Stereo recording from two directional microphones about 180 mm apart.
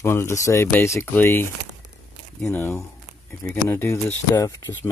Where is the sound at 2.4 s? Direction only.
5° left (ahead or behind).